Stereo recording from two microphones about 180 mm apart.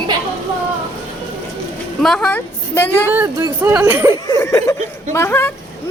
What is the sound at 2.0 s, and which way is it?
A woman's voice, 5° left (ahead or behind).